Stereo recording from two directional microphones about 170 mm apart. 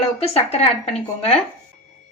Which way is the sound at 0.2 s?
35° left (ahead or behind).